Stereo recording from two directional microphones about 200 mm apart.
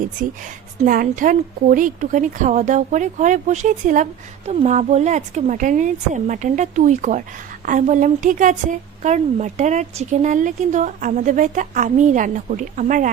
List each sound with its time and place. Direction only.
0.2 s speech: 45° right (ahead or behind)